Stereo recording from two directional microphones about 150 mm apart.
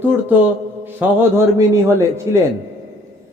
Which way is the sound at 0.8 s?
15° right (ahead or behind).